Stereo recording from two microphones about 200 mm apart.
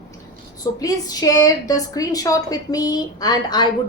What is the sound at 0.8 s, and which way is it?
A woman's voice, 15° left (ahead or behind).